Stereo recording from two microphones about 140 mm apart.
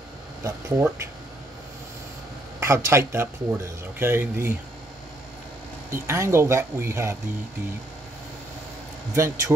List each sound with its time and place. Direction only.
0.4 s speech: 20° right (ahead or behind)
2.6 s speech: 20° right (ahead or behind)
5.9 s speech: 20° right (ahead or behind)
9.1 s speech: 20° right (ahead or behind)